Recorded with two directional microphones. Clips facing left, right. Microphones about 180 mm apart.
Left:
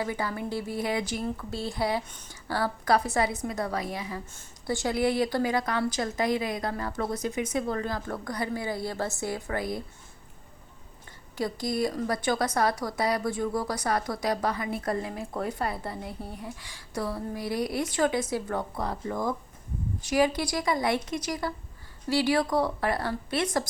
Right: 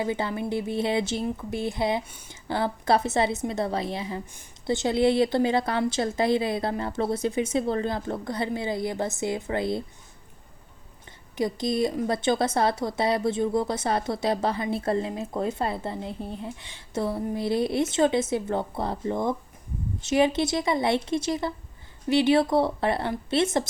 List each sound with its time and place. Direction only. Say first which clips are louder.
0.0 s a woman's voice: right 3 dB; 25° right (ahead or behind)
2.0 s speech: even; 10° right (ahead or behind)
2.3 s a woman's voice: right 2 dB; 20° right (ahead or behind)
11.3 s a woman's voice: right 3 dB; 20° right (ahead or behind)